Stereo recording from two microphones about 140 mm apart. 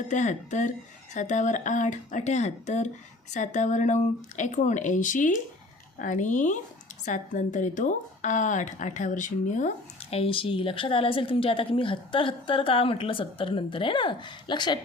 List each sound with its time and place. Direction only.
0.1 s a woman's voice: 60° left (ahead or behind)
10.2 s a woman's voice: 40° left (ahead or behind)